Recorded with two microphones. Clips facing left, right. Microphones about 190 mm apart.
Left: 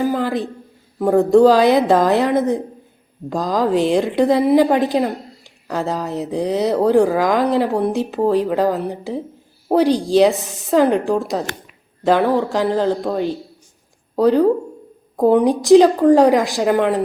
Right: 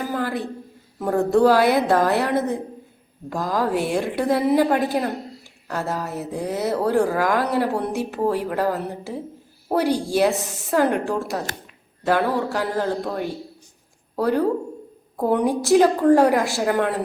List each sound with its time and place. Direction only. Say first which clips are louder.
0.2 s a woman's voice: left 4 dB; 20° left (ahead or behind)